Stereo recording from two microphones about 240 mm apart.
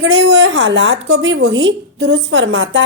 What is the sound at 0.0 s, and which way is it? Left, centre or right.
Speech, right.